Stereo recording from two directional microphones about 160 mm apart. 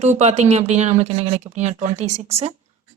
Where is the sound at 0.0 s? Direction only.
45° right (ahead or behind).